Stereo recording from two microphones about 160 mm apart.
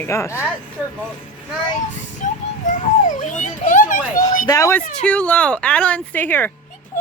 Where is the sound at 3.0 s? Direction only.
50° left (ahead or behind).